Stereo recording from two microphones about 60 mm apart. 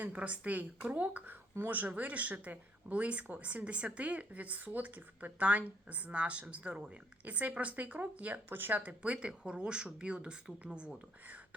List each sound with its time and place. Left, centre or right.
0.0 s speech: right
8.4 s speech: right
8.8 s speech: right